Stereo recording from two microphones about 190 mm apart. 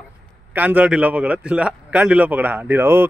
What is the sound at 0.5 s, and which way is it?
A man's voice, 10° right (ahead or behind).